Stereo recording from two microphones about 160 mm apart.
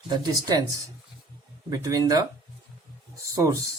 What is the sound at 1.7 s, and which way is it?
Speech, 20° right (ahead or behind).